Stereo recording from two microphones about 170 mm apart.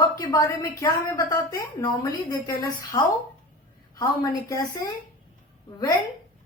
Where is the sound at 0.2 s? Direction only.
20° left (ahead or behind).